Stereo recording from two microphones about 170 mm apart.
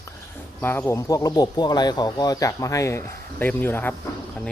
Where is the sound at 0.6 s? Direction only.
10° left (ahead or behind).